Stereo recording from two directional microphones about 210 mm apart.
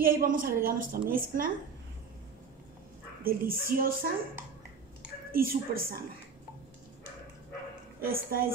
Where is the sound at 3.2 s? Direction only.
45° right (ahead or behind).